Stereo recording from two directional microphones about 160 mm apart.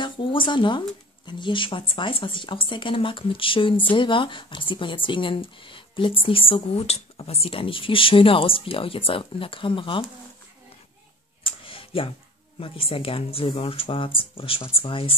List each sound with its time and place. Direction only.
0.0 s speech: 30° left (ahead or behind)
11.4 s a sound: 35° left (ahead or behind)
12.5 s speech: 35° left (ahead or behind)